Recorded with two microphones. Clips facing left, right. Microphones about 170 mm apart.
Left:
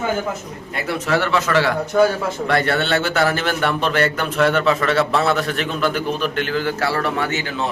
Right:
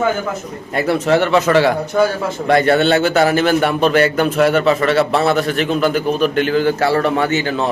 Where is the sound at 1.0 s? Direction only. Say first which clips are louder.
Right 5 dB; 25° right (ahead or behind).